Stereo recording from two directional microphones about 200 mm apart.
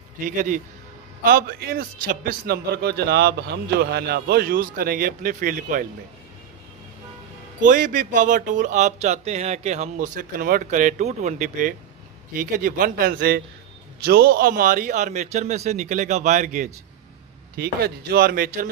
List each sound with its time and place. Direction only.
0.2 s a man's voice: 40° right (ahead or behind)
7.6 s a man's voice: 40° right (ahead or behind)
17.6 s a man's voice: 50° right (ahead or behind)